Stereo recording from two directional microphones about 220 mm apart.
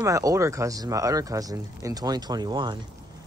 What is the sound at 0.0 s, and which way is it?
Speech, 15° right (ahead or behind).